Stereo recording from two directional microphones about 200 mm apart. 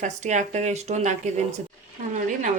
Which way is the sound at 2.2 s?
40° right (ahead or behind).